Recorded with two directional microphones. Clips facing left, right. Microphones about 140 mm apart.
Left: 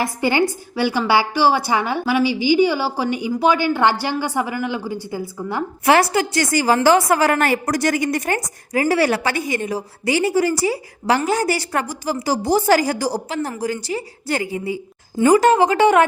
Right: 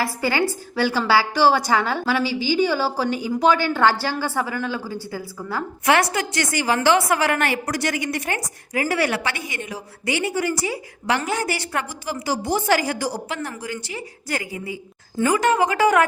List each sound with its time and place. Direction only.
0.0 s a woman's voice: 20° left (ahead or behind)